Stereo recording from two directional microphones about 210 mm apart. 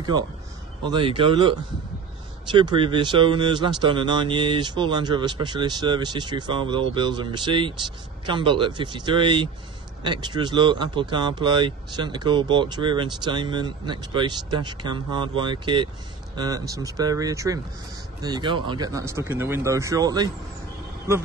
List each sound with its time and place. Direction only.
0.8 s speech: 25° right (ahead or behind)